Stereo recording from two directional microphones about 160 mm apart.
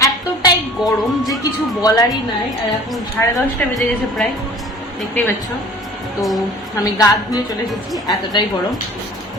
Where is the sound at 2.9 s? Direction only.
Centre (ahead or behind).